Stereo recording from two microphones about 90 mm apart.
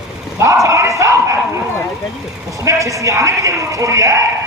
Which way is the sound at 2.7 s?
35° right (ahead or behind).